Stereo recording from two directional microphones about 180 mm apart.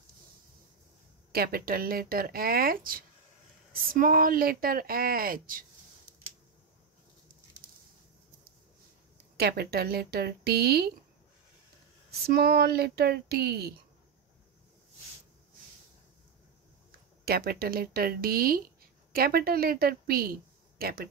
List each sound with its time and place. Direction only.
1.3 s speech: 55° right (ahead or behind)
9.4 s speech: 65° right (ahead or behind)
12.3 s speech: 55° right (ahead or behind)
17.2 s speech: 60° right (ahead or behind)